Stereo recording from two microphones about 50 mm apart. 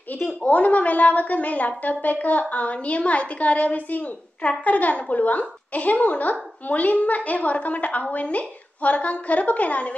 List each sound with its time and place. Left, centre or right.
0.1 s a woman's voice: left